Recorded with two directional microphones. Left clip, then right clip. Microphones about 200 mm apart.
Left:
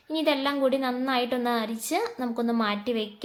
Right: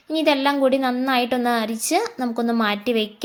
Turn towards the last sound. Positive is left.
turn(degrees=-30)  # may be behind; listen again after turning